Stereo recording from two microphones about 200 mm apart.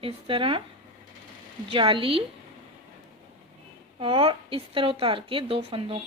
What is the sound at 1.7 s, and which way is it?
Speech, 25° right (ahead or behind).